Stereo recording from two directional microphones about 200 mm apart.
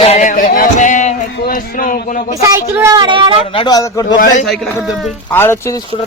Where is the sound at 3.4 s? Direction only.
25° left (ahead or behind).